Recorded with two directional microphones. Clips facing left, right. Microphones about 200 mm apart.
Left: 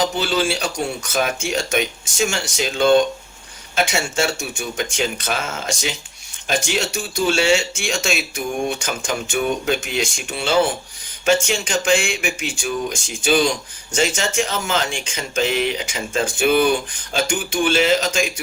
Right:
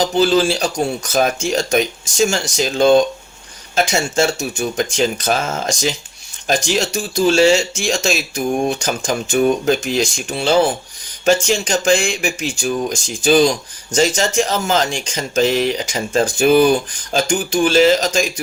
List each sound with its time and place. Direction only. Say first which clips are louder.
0.0 s speech: right 6 dB; 40° right (ahead or behind)